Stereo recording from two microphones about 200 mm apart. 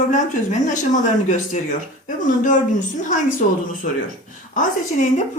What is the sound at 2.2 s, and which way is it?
Speech, 40° left (ahead or behind).